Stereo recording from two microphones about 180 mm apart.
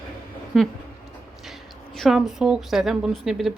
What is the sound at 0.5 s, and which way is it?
Speech, centre (ahead or behind).